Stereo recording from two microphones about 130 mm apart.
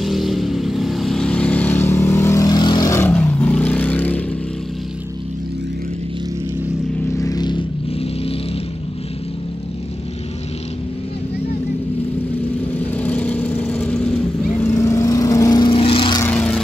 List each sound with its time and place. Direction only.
0.0 s vehicle: centre (ahead or behind); by 2.9 s 35° left (ahead or behind)
2.9 s vehicle: 15° left (ahead or behind)
7.1 s vehicle: 25° left (ahead or behind)
12.7 s vehicle: 10° left (ahead or behind); by 15.7 s 30° left (ahead or behind)
15.7 s vehicle: 45° left (ahead or behind)
16.3 s vehicle: 10° left (ahead or behind)